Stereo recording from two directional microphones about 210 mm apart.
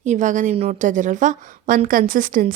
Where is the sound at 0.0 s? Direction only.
35° right (ahead or behind).